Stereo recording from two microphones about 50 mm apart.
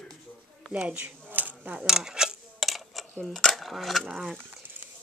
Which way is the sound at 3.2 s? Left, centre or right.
Centre.